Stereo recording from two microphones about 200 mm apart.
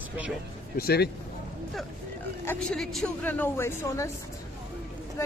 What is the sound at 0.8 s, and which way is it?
Speech, 50° left (ahead or behind).